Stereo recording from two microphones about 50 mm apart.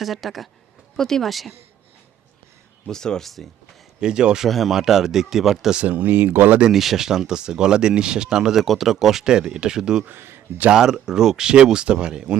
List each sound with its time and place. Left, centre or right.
0.0 s speech: centre
2.8 s speech: centre
4.0 s speech: centre
4.4 s speech: centre
5.8 s speech: right
6.7 s speech: centre
8.6 s speech: centre
10.1 s a man's voice: right
10.7 s speech: centre